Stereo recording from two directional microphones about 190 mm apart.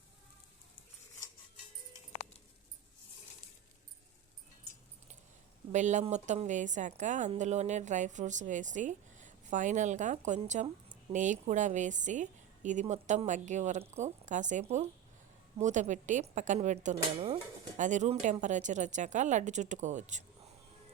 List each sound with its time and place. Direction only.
5.7 s a woman's voice: 40° right (ahead or behind)